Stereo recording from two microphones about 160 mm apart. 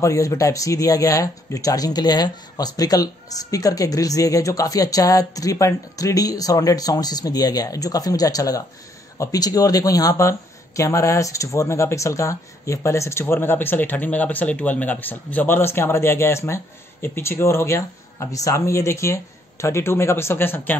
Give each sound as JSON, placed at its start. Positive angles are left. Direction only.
{"t": 0.0, "sound": "speech", "side_deg": 20}